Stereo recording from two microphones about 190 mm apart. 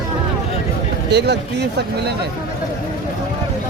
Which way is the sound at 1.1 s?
60° right (ahead or behind).